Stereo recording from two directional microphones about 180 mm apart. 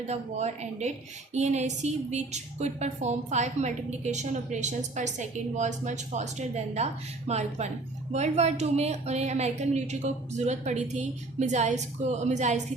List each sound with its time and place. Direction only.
0.1 s a woman's voice: 40° right (ahead or behind)